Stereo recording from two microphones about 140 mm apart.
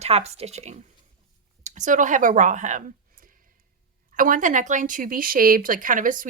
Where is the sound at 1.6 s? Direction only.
60° right (ahead or behind).